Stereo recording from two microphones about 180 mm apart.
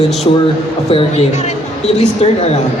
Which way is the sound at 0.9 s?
35° left (ahead or behind).